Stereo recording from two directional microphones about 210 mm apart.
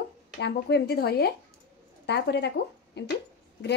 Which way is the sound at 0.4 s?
55° left (ahead or behind).